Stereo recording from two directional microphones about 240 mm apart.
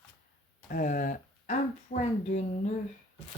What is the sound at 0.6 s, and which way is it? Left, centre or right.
Speech, left.